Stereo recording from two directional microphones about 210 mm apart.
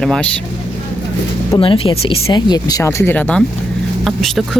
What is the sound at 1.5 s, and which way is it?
Speech, 25° left (ahead or behind).